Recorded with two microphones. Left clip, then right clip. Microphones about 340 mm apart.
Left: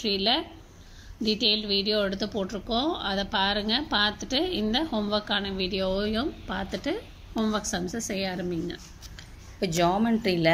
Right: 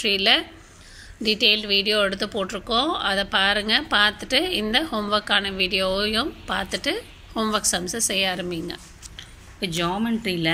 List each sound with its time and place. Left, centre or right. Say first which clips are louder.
0.0 s speech: right 6 dB; centre
9.1 s speech: right 6 dB; left